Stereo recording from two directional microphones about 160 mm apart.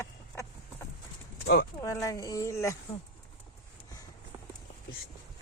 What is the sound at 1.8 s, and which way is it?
Speech, 20° left (ahead or behind).